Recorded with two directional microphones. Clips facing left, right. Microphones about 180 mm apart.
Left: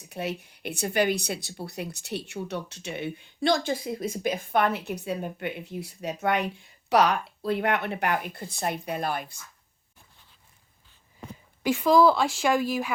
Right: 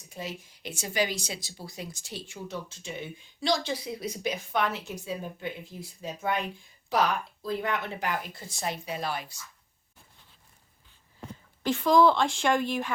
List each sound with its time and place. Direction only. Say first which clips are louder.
0.1 s a woman's voice: left 6 dB; 65° left (ahead or behind)
11.6 s a woman's voice: left 2 dB; 10° left (ahead or behind)